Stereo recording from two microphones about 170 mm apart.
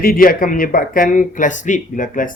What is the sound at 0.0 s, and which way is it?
Speech, 55° left (ahead or behind).